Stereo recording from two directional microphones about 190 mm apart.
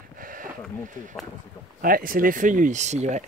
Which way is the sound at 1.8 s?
50° right (ahead or behind).